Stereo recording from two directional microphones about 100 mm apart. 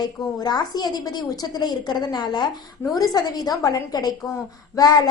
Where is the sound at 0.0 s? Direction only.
45° left (ahead or behind).